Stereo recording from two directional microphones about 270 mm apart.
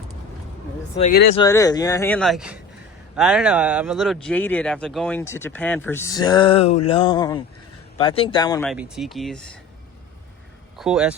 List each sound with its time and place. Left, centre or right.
0.9 s speech: left
1.4 s speech: centre
8.7 s speech: centre
10.8 s speech: centre